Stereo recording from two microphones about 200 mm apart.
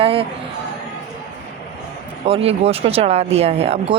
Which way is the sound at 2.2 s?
30° right (ahead or behind).